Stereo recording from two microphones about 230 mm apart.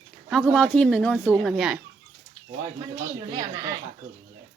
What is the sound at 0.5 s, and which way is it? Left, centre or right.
Speech, centre.